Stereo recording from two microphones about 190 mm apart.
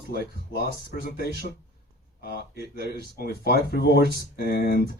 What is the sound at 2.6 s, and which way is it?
Speech, 55° right (ahead or behind).